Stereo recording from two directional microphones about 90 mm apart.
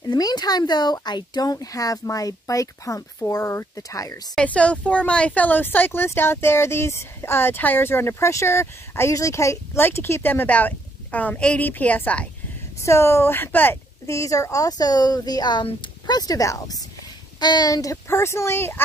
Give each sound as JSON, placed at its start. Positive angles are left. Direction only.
{"t": 0.0, "sound": "speech", "side_deg": 50}
{"t": 4.4, "sound": "speech", "side_deg": 15}
{"t": 12.8, "sound": "speech", "side_deg": 30}
{"t": 14.0, "sound": "speech", "side_deg": 35}
{"t": 18.0, "sound": "speech", "side_deg": 30}